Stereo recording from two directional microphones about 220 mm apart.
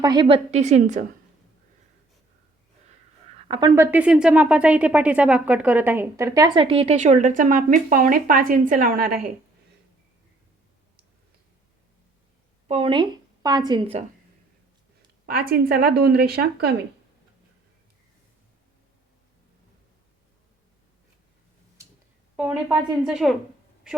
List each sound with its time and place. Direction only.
0.0 s speech: 20° right (ahead or behind)
3.3 s a woman's voice: 20° right (ahead or behind)
3.9 s speech: 5° right (ahead or behind); by 9.3 s 40° right (ahead or behind)
12.6 s a woman's voice: 25° right (ahead or behind)
15.3 s a woman's voice: 45° right (ahead or behind)
23.0 s a woman's voice: centre (ahead or behind)